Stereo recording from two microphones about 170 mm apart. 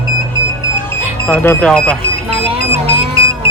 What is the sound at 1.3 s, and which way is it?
Speech, 10° left (ahead or behind).